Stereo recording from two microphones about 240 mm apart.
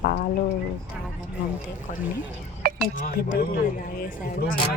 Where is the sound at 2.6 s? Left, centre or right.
Right.